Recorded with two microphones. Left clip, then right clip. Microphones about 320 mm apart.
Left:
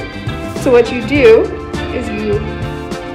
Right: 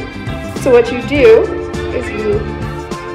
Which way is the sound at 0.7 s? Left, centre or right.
Centre.